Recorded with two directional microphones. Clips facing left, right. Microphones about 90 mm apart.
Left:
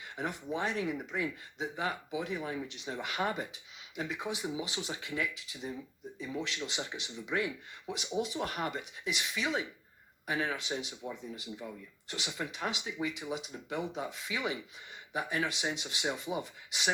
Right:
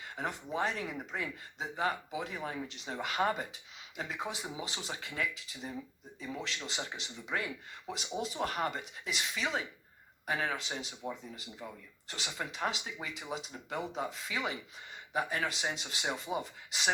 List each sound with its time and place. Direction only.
0.2 s speech: 40° right (ahead or behind)
6.4 s speech: 35° right (ahead or behind)